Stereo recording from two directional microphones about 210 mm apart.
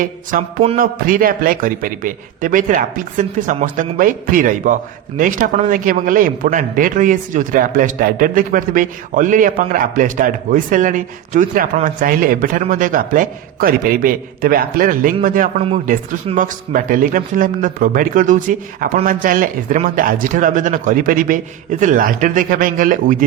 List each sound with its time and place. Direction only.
0.0 s a man's voice: 40° right (ahead or behind)